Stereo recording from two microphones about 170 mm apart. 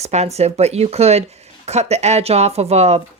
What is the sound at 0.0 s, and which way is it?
Speech, 40° right (ahead or behind).